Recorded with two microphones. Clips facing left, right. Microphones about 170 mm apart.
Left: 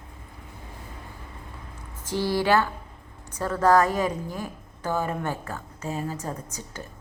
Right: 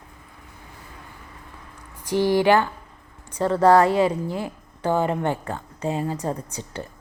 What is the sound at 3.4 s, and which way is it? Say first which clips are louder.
Speech: right 4 dB; 35° right (ahead or behind).